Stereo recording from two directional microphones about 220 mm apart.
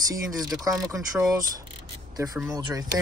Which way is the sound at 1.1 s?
15° right (ahead or behind).